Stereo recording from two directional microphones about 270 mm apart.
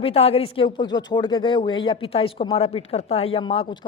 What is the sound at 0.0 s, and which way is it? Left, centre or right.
Speech, left.